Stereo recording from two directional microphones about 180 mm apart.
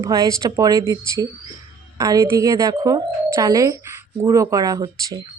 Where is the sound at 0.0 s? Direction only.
20° right (ahead or behind).